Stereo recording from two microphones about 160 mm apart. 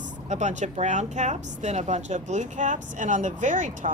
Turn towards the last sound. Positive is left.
turn(degrees=-50)  # may be behind; listen again after turning